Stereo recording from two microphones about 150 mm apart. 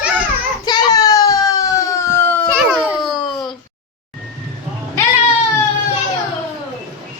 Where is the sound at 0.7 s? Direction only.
25° left (ahead or behind).